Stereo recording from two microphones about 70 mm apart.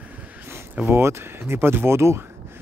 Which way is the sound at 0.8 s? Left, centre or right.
Right.